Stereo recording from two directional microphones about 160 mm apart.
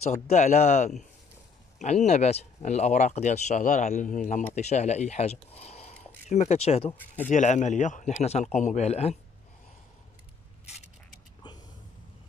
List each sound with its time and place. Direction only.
0.3 s speech: 45° left (ahead or behind)